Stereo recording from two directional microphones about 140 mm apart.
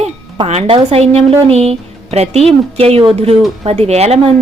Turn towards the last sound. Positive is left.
turn(degrees=-50)  # may be behind; listen again after turning